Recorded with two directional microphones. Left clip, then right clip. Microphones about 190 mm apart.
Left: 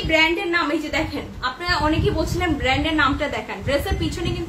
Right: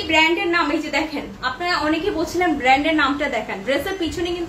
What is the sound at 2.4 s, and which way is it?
A woman's voice, 15° left (ahead or behind).